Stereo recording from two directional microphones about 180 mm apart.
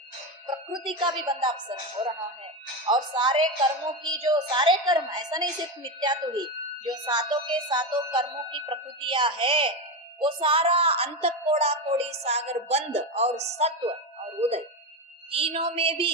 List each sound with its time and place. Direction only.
0.4 s a woman's voice: 25° right (ahead or behind)
2.8 s a woman's voice: 25° right (ahead or behind)